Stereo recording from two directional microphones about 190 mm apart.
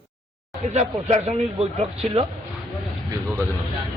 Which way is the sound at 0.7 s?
35° right (ahead or behind).